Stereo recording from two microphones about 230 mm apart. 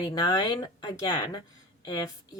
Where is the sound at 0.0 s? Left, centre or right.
Centre.